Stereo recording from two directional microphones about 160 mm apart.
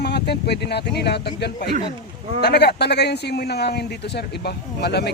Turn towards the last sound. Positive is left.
turn(degrees=90)